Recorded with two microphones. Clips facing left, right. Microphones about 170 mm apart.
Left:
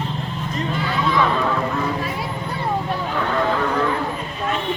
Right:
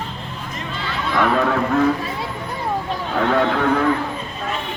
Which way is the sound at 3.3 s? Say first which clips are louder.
Right 3 dB; 70° right (ahead or behind).